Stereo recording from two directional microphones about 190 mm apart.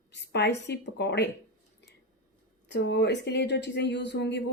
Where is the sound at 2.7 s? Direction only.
65° left (ahead or behind).